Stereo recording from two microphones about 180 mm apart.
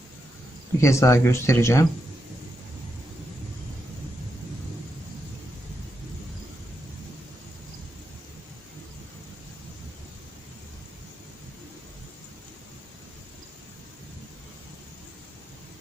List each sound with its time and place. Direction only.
0.8 s speech: 15° left (ahead or behind)